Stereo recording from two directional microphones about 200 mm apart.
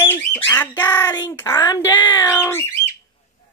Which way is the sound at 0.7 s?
20° left (ahead or behind).